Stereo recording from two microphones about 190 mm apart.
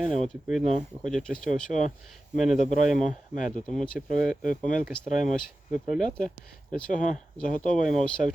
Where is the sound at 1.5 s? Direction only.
40° left (ahead or behind).